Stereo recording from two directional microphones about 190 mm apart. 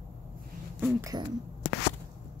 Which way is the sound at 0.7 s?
10° right (ahead or behind).